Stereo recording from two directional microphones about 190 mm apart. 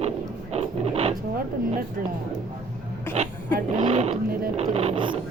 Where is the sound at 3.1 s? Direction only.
35° right (ahead or behind).